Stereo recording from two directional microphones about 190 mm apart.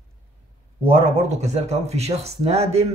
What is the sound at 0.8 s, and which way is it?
Speech, 30° right (ahead or behind).